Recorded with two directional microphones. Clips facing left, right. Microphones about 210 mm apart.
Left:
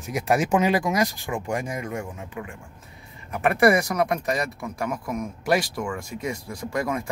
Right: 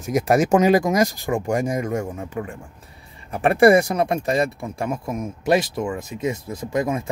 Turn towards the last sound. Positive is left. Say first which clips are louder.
# right 4 dB
turn(degrees=-20)  # may be behind; listen again after turning